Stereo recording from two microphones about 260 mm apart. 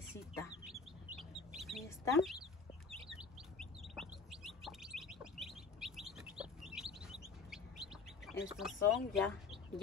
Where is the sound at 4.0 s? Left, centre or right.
Centre.